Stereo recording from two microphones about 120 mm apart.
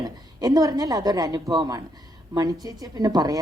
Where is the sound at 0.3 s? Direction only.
30° right (ahead or behind).